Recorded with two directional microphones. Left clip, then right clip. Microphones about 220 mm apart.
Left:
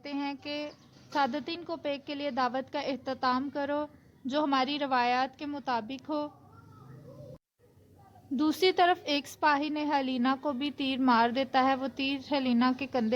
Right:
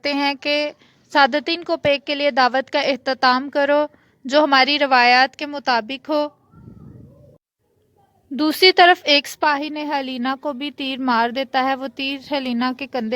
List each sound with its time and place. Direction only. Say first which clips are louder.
0.0 s a woman's voice: right 16 dB; 40° right (ahead or behind)
8.4 s a woman's voice: right 13 dB; 30° right (ahead or behind)